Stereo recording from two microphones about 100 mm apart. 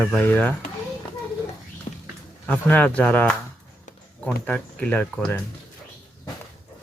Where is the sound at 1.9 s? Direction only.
90° left.